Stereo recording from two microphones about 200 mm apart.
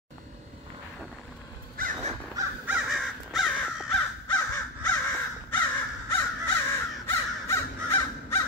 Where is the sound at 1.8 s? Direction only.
40° right (ahead or behind).